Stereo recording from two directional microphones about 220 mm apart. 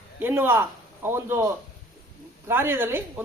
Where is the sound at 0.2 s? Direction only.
10° right (ahead or behind).